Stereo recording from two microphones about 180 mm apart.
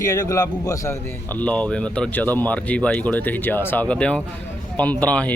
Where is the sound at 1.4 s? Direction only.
5° left (ahead or behind).